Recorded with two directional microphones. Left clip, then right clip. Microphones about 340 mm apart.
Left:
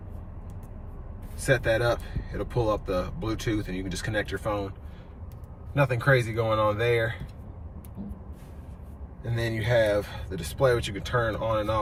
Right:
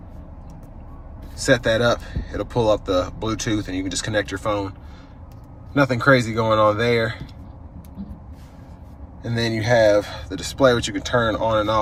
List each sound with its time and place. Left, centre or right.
1.6 s speech: centre
5.7 s speech: centre
9.4 s speech: centre